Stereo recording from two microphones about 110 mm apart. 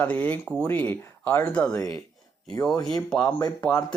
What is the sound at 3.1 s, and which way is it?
Speech, 10° left (ahead or behind).